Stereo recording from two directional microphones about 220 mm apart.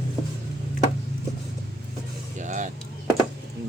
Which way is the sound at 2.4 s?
35° right (ahead or behind).